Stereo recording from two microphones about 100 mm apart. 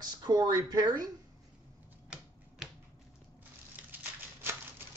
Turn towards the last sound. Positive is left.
turn(degrees=-20)  # may be behind; listen again after turning